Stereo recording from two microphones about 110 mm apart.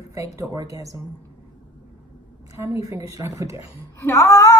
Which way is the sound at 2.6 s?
30° right (ahead or behind).